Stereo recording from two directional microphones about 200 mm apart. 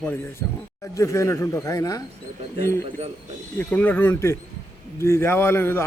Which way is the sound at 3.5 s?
10° left (ahead or behind).